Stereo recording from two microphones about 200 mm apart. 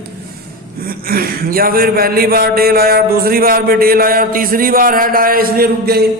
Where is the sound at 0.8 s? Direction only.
45° right (ahead or behind).